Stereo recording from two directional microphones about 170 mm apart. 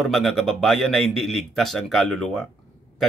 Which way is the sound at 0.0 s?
Centre (ahead or behind).